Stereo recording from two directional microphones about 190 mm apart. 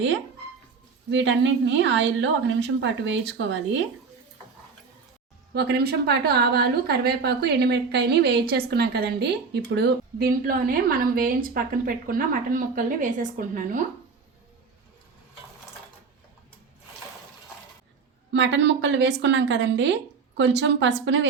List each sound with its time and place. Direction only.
1.1 s a woman's voice: 75° right (ahead or behind)
5.5 s a woman's voice: 60° right (ahead or behind)
18.3 s a woman's voice: 70° right (ahead or behind)